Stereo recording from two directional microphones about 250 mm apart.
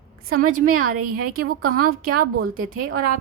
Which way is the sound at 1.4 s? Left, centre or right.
Right.